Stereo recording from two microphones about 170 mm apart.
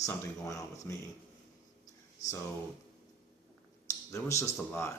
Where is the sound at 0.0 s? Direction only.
20° left (ahead or behind).